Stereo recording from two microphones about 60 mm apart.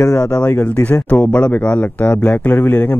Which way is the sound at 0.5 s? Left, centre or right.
Left.